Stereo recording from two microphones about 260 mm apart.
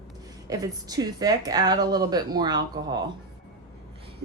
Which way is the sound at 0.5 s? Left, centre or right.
Centre.